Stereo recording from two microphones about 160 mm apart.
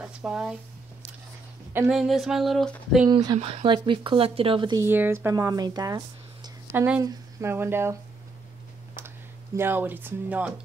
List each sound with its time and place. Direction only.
0.0 s speech: 5° right (ahead or behind)
1.9 s a sound: centre (ahead or behind)
3.1 s speech: 25° right (ahead or behind)
3.3 s speech: 45° right (ahead or behind)
3.6 s speech: 30° right (ahead or behind)
4.7 s speech: 15° right (ahead or behind)
6.7 s speech: 10° right (ahead or behind)
9.6 s speech: 15° right (ahead or behind)